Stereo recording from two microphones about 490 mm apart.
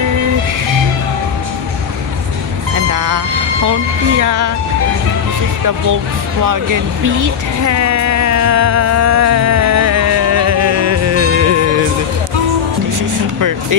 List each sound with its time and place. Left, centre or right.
2.7 s vehicle: right
4.2 s speech: right
6.4 s a sound: right